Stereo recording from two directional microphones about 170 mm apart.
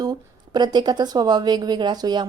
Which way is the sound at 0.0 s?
25° right (ahead or behind).